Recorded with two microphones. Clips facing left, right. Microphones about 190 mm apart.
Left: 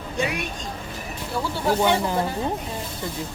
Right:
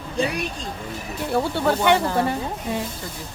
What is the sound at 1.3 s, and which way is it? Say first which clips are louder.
Speech: right 3 dB; 60° right (ahead or behind).